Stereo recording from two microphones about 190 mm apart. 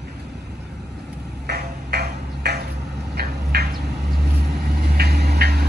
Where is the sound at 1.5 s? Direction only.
55° right (ahead or behind).